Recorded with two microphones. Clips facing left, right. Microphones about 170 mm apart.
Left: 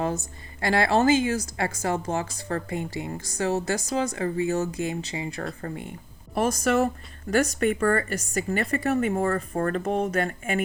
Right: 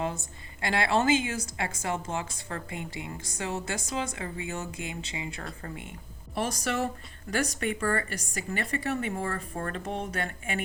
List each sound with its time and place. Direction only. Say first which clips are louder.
0.0 s a woman's voice: left 5 dB; 40° left (ahead or behind)
6.3 s speech: left 7 dB; 45° left (ahead or behind)